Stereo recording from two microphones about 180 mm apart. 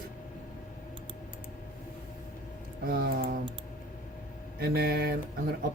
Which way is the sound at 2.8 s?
55° right (ahead or behind).